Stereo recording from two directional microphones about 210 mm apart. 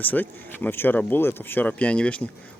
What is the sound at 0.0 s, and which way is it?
Speech, 10° left (ahead or behind).